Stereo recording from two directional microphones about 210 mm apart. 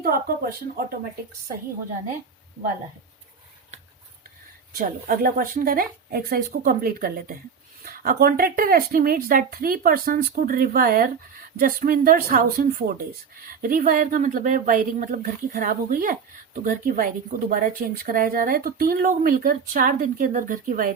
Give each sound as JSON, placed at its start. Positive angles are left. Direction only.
{"t": 0.0, "sound": "speech", "side_deg": -45}
{"t": 4.7, "sound": "a woman's voice", "side_deg": -40}